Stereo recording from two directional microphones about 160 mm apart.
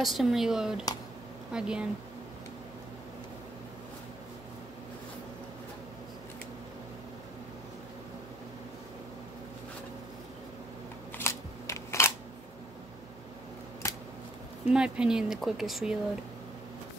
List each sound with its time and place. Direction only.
0.0 s speech: centre (ahead or behind)
11.1 s a sound: 15° left (ahead or behind)
14.7 s speech: 5° right (ahead or behind)